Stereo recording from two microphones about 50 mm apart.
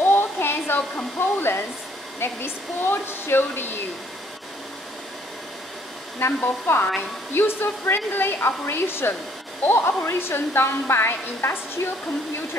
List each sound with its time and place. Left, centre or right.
0.0 s a sound: left
1.2 s hair dryer: left
2.1 s a woman's voice: left
6.2 s hair dryer: left
6.7 s a woman's voice: left